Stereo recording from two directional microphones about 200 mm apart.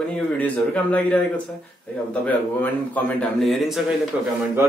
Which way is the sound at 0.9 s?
5° left (ahead or behind).